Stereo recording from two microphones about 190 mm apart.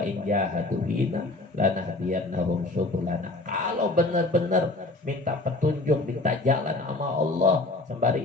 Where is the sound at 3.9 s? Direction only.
45° right (ahead or behind).